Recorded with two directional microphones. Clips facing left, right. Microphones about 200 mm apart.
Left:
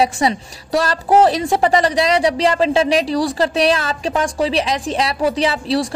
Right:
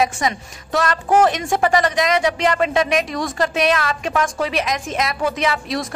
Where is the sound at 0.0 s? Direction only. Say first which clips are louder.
Left 3 dB; 30° left (ahead or behind).